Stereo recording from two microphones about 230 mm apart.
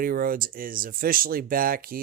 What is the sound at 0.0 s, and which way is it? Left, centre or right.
Speech, right.